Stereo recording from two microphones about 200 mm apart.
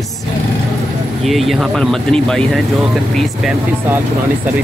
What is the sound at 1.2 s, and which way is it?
Speech, centre (ahead or behind).